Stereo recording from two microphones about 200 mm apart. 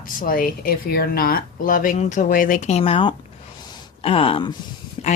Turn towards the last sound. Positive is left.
turn(degrees=30)  # may be behind; listen again after turning